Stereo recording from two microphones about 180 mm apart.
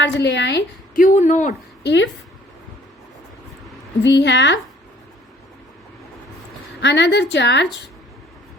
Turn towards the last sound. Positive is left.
turn(degrees=75)  # may be behind; listen again after turning